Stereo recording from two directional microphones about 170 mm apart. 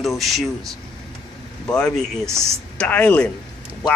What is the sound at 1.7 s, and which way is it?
A woman's voice, 5° left (ahead or behind).